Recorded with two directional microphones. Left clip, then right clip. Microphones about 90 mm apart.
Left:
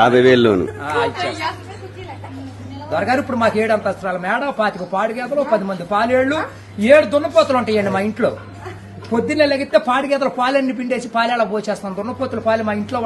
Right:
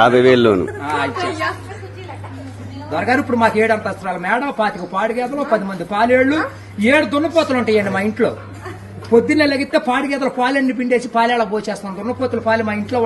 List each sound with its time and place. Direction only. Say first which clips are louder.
0.0 s speech: right 1 dB; 40° left (ahead or behind)
1.1 s a woman's voice: right 1 dB; 45° right (ahead or behind)
2.9 s speech: right 1 dB; 40° left (ahead or behind)